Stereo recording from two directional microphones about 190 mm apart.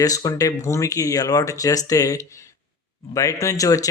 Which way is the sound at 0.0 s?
20° left (ahead or behind).